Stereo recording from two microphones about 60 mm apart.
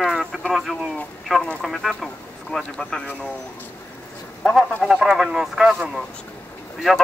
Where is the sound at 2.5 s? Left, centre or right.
Centre.